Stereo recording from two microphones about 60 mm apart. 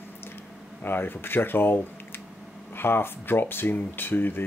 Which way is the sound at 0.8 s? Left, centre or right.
Left.